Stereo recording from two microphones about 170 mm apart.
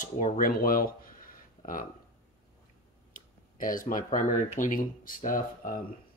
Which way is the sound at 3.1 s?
55° left (ahead or behind).